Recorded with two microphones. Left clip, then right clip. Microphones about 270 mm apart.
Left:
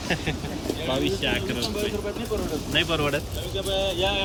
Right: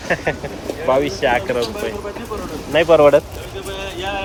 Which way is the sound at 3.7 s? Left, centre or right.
Centre.